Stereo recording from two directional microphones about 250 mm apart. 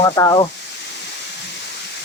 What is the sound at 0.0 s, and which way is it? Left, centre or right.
Sizzle, centre.